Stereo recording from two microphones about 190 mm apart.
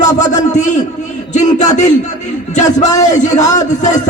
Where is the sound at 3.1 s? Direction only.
40° left (ahead or behind).